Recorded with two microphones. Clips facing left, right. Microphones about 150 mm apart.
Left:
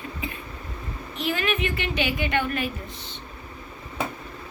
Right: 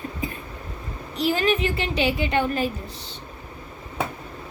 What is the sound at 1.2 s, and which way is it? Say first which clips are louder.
A woman's voice: right 5 dB; 35° right (ahead or behind).